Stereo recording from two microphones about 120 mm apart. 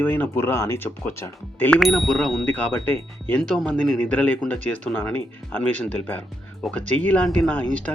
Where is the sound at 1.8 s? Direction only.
Centre (ahead or behind).